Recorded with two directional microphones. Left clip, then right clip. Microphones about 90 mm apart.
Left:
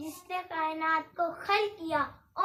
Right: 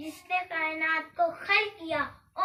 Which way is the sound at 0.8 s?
35° left (ahead or behind).